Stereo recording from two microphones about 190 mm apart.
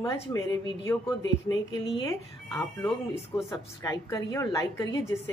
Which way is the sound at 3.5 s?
15° left (ahead or behind).